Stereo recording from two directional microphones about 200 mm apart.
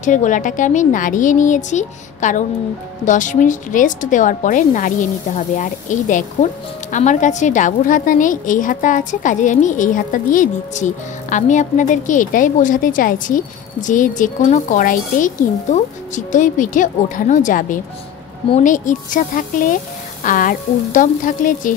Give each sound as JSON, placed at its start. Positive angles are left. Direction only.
{"t": 0.0, "sound": "a woman's voice", "side_deg": 40}